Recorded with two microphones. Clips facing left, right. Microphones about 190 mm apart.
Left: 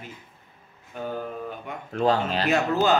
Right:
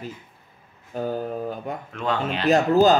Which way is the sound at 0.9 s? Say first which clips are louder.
Right 5 dB; 35° right (ahead or behind).